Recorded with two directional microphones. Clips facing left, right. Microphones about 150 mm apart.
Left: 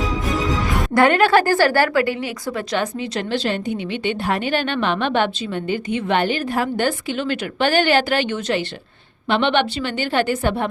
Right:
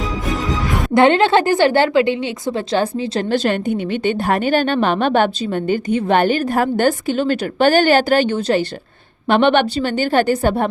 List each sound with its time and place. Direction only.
0.9 s a woman's voice: 25° right (ahead or behind)
3.2 s a woman's voice: 45° right (ahead or behind)